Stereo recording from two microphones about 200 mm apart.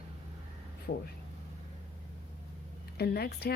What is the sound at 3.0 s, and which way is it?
Speech, 50° left (ahead or behind).